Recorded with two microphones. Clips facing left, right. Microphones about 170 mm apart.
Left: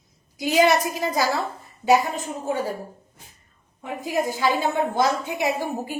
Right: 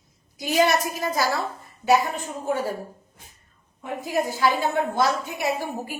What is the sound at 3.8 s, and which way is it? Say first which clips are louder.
A woman's voice: left 1 dB; 15° left (ahead or behind).